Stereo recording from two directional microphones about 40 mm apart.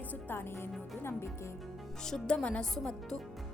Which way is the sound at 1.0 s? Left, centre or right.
Left.